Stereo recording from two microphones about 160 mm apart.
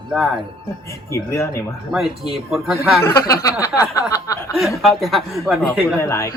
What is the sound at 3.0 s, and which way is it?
Speech, 20° left (ahead or behind).